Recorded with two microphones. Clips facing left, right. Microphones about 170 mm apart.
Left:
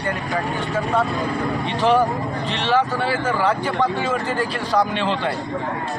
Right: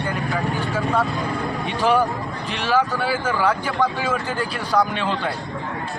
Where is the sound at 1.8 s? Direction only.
Centre (ahead or behind).